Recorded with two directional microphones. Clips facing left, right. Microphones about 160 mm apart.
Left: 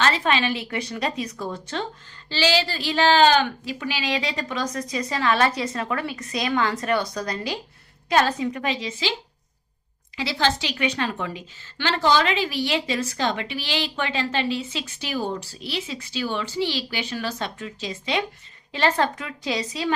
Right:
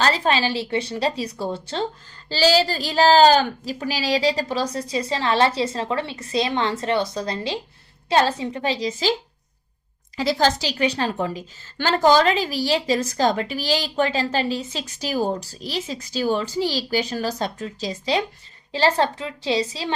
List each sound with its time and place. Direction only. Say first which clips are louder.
0.0 s a woman's voice: right 2 dB; 35° right (ahead or behind)
10.2 s a woman's voice: right 4 dB; 40° right (ahead or behind)